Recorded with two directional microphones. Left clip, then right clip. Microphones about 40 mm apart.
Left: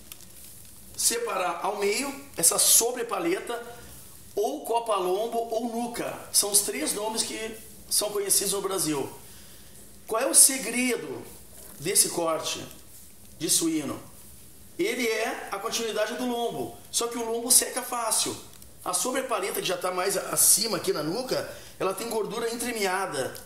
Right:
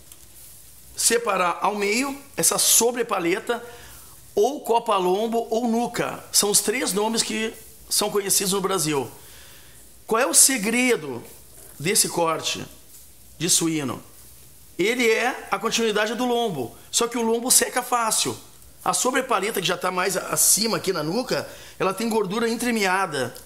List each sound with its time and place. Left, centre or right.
0.9 s speech: right
10.0 s speech: right